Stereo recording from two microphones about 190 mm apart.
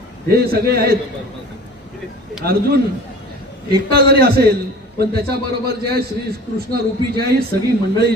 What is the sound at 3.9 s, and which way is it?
Speech, 55° right (ahead or behind).